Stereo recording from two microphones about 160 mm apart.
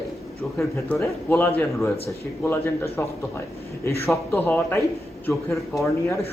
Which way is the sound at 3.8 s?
15° left (ahead or behind).